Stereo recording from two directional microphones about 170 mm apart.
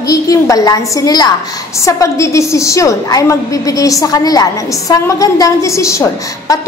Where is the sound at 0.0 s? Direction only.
20° left (ahead or behind).